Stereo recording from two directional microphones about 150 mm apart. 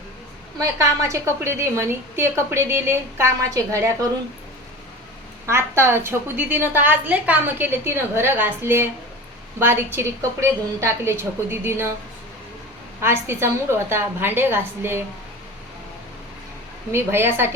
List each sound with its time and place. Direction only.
0.6 s a woman's voice: 20° right (ahead or behind)
5.5 s a woman's voice: 15° right (ahead or behind)
13.0 s a woman's voice: 15° right (ahead or behind)
16.9 s a woman's voice: 15° right (ahead or behind)